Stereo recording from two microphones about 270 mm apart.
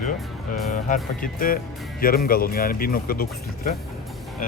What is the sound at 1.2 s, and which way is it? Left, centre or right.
Speech, left.